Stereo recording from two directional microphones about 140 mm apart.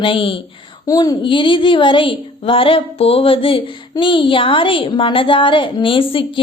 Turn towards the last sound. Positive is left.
turn(degrees=40)  # may be behind; listen again after turning